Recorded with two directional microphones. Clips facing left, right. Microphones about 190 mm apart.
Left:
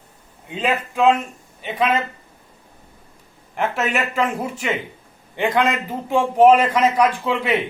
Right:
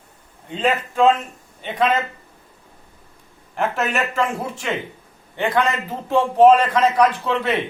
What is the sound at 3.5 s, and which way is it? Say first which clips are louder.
A man's voice: even; 5° left (ahead or behind).